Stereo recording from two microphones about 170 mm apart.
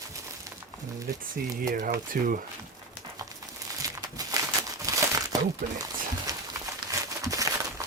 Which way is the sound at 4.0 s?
20° right (ahead or behind).